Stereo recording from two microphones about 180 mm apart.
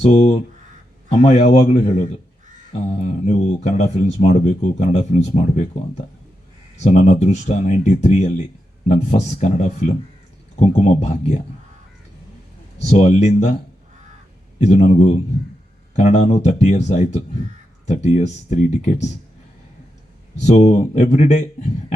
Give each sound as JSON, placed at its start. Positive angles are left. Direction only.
{"t": 0.0, "sound": "speech", "side_deg": 40}
{"t": 12.8, "sound": "speech", "side_deg": 35}
{"t": 14.6, "sound": "speech", "side_deg": 40}
{"t": 20.4, "sound": "speech", "side_deg": 40}